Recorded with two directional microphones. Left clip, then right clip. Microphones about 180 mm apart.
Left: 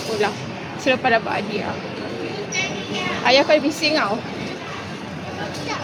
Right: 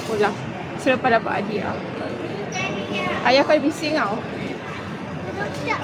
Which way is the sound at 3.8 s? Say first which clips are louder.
Left 3 dB; 20° left (ahead or behind).